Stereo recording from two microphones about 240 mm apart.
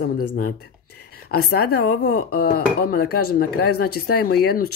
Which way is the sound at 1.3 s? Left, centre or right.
Left.